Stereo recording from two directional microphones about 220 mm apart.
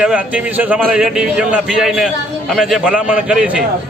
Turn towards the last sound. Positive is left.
turn(degrees=-5)  # may be behind; listen again after turning